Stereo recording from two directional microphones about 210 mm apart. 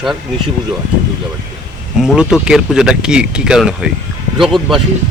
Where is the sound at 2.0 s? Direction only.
5° right (ahead or behind).